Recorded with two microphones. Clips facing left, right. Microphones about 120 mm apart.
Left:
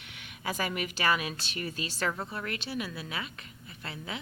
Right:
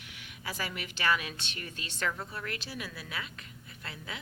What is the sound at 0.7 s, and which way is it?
A woman's voice, 10° left (ahead or behind).